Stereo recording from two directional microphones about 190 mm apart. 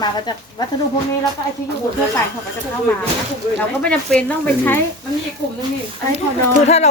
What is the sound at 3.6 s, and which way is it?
Speech, 5° left (ahead or behind).